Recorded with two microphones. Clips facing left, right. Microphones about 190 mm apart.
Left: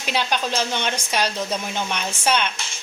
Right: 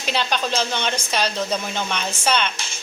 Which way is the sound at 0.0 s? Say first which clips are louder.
Even; 10° left (ahead or behind).